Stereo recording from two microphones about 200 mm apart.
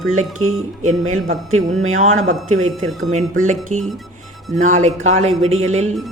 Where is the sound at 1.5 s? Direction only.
90° right.